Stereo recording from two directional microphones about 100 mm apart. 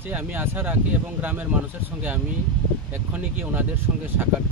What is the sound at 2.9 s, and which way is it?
Speech, 20° right (ahead or behind).